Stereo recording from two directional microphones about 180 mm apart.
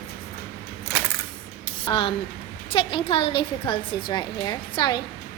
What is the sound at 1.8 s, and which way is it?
A woman's voice, 30° left (ahead or behind).